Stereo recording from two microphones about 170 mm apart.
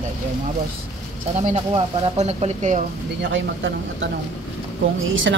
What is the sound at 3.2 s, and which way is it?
Speech, 90° right.